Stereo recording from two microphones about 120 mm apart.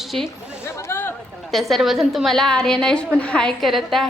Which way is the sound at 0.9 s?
20° left (ahead or behind).